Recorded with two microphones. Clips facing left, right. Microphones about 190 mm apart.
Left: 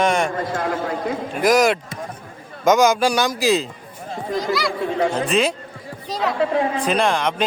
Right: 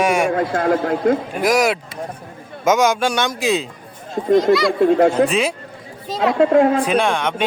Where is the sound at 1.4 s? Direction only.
Centre (ahead or behind).